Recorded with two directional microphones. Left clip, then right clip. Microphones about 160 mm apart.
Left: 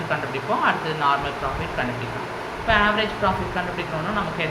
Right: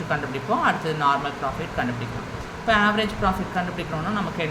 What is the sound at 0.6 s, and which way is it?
Speech, 35° right (ahead or behind).